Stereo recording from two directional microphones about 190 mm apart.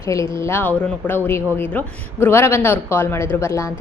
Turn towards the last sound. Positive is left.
turn(degrees=15)  # may be behind; listen again after turning